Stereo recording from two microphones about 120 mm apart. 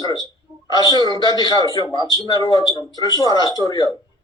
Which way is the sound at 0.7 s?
35° left (ahead or behind).